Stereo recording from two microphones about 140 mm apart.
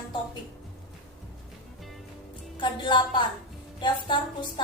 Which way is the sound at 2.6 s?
35° left (ahead or behind).